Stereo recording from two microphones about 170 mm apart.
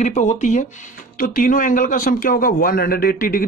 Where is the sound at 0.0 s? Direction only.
45° left (ahead or behind).